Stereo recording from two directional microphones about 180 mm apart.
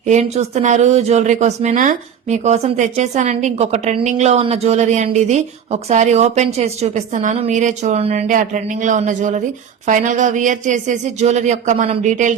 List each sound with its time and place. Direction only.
0.1 s speech: 40° right (ahead or behind)